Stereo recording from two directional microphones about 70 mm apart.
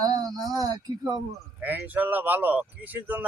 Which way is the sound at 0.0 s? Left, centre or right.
Right.